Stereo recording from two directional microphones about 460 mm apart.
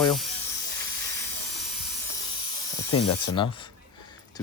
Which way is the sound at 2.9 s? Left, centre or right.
Left.